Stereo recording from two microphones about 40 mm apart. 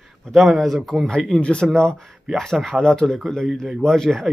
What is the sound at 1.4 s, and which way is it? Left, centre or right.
Speech, left.